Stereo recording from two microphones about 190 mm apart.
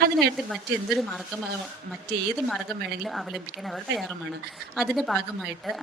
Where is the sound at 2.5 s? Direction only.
Centre (ahead or behind).